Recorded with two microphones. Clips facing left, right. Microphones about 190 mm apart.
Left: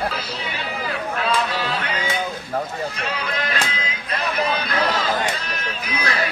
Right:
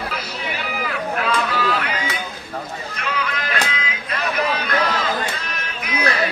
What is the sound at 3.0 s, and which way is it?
Music, 35° left (ahead or behind).